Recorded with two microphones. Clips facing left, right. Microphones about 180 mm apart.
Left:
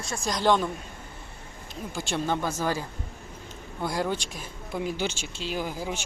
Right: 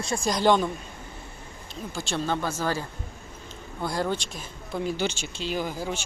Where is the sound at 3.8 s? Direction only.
10° left (ahead or behind).